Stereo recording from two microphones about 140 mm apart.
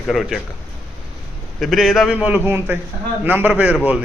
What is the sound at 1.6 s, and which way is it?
A man's voice, centre (ahead or behind).